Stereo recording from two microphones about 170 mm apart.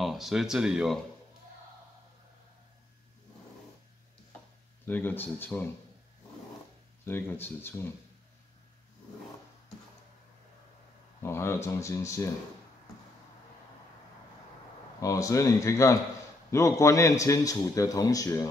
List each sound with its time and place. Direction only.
0.0 s speech: centre (ahead or behind)
4.8 s speech: 10° left (ahead or behind)
7.1 s speech: 15° left (ahead or behind)
11.2 s speech: 15° left (ahead or behind)
15.0 s a man's voice: 20° left (ahead or behind)